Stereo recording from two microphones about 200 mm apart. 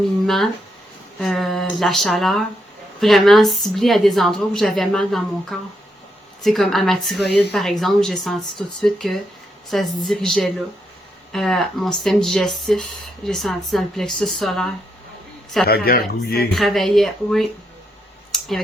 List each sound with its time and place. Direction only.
0.3 s speech: centre (ahead or behind)
15.6 s a man's voice: 50° left (ahead or behind)
16.6 s speech: centre (ahead or behind)
18.3 s a sound: centre (ahead or behind)